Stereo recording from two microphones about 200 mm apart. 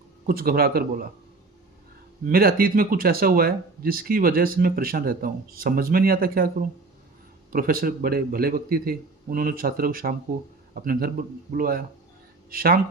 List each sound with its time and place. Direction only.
0.3 s speech: 50° right (ahead or behind)
2.2 s speech: 45° right (ahead or behind)